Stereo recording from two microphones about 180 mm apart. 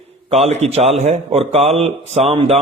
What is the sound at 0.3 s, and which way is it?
Speech, 35° right (ahead or behind).